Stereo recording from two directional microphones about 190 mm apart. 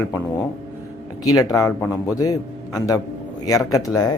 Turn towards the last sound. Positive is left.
turn(degrees=20)  # may be behind; listen again after turning